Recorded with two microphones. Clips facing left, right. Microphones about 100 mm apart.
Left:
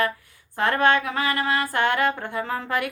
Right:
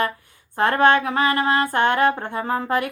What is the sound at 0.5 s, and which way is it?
Speech, 30° right (ahead or behind).